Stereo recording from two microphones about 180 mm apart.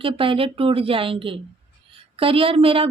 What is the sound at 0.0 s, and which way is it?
A woman's voice, 30° right (ahead or behind).